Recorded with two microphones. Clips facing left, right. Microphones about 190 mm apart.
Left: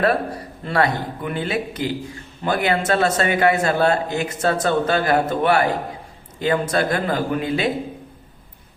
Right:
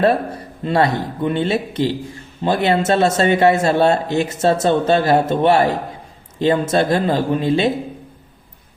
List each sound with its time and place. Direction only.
0.6 s speech: 25° right (ahead or behind)